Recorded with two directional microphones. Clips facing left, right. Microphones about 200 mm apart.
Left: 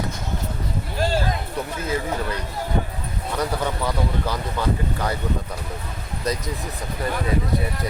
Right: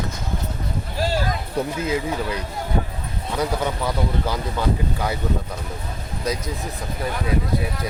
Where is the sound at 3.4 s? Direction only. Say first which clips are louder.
Right 1 dB; 10° right (ahead or behind).